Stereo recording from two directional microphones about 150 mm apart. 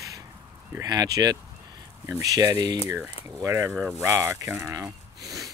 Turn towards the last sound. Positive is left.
turn(degrees=-20)  # may be behind; listen again after turning